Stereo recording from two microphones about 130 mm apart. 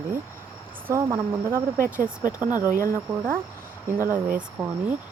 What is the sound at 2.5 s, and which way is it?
Speech, 25° left (ahead or behind).